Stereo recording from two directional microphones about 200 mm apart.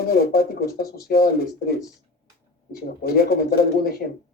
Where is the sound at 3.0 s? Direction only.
50° left (ahead or behind).